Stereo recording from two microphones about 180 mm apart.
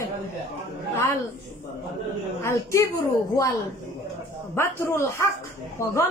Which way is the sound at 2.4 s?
15° left (ahead or behind).